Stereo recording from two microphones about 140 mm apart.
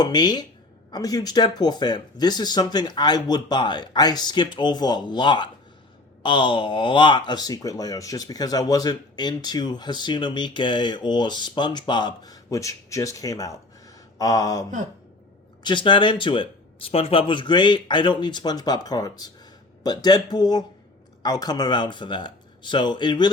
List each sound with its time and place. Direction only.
0.0 s speech: 30° left (ahead or behind)